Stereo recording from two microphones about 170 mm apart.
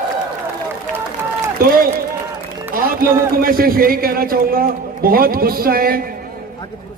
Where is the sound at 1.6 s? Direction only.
60° right (ahead or behind).